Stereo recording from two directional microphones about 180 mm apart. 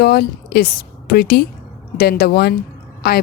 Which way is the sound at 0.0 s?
60° left (ahead or behind).